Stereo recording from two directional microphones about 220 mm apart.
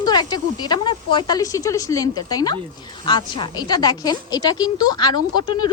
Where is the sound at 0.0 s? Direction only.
20° left (ahead or behind).